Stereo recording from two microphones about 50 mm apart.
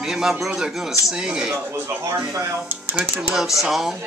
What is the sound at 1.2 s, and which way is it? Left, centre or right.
Speech, centre.